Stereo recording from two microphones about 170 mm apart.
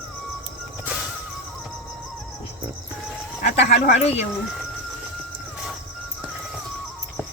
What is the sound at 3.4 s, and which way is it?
Speech, 90° left.